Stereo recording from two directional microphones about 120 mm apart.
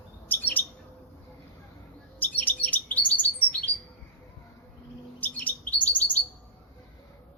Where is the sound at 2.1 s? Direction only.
15° left (ahead or behind).